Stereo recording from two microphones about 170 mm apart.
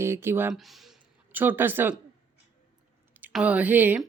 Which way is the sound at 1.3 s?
10° right (ahead or behind).